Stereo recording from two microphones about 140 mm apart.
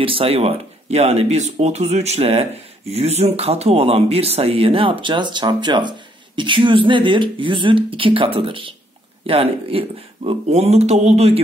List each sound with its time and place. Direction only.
0.0 s speech: 40° right (ahead or behind)